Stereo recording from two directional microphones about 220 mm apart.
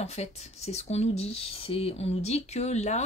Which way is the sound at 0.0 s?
30° left (ahead or behind).